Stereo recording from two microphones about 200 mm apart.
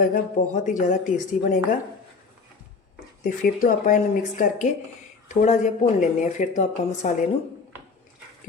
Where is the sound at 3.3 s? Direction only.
45° left (ahead or behind).